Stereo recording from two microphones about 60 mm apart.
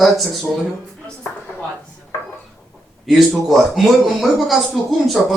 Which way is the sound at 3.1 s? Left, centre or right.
Centre.